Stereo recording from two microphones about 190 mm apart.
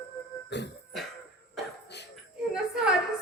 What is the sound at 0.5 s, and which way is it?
Cough, 65° left (ahead or behind).